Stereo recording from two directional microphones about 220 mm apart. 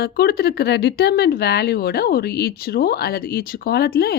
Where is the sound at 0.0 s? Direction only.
45° left (ahead or behind).